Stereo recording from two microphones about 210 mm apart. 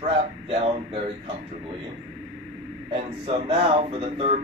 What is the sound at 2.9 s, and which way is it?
Speech, 25° right (ahead or behind).